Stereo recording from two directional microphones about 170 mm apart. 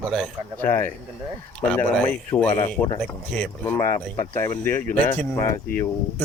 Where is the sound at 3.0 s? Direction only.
10° left (ahead or behind).